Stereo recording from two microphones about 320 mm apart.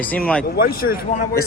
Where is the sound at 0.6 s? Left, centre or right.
Left.